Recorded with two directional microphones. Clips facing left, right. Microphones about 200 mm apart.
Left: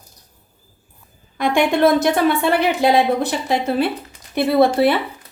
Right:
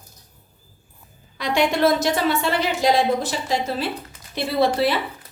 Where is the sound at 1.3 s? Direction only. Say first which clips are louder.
Left 4 dB; 55° left (ahead or behind).